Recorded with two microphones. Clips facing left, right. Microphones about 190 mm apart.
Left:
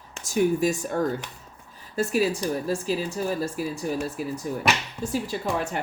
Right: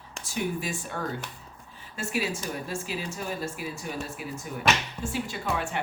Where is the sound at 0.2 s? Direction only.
45° left (ahead or behind).